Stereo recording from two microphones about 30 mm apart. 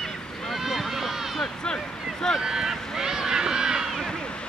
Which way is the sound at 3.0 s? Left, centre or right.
Centre.